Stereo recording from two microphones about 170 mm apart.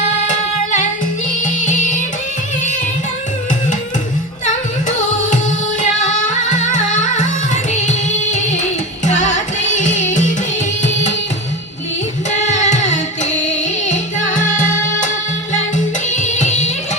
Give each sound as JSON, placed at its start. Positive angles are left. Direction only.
{"t": 0.3, "sound": "music", "side_deg": 50}
{"t": 6.5, "sound": "music", "side_deg": 45}
{"t": 12.3, "sound": "music", "side_deg": 45}
{"t": 16.1, "sound": "music", "side_deg": 45}